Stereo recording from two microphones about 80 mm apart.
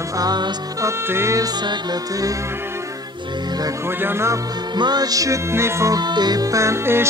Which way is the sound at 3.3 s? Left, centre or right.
Right.